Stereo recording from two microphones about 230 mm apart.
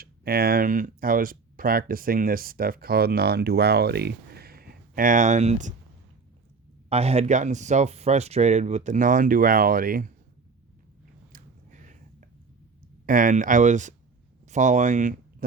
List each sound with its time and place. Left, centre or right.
0.0 s speech: right
6.9 s speech: right
11.3 s a sound: right
13.1 s speech: right